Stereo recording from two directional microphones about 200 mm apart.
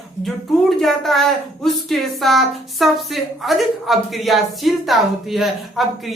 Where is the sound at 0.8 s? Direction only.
Centre (ahead or behind).